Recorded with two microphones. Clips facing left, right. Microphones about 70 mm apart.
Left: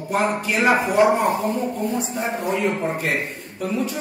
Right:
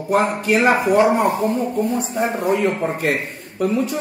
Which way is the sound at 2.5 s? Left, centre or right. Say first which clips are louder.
Right 3 dB; right.